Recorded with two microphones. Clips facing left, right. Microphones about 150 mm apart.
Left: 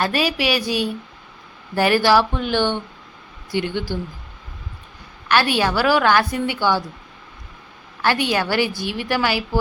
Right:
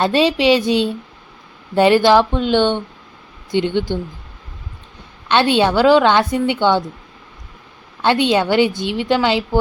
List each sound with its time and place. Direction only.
0.0 s a woman's voice: 25° right (ahead or behind)
5.3 s a woman's voice: 25° right (ahead or behind)
8.0 s a woman's voice: 20° right (ahead or behind)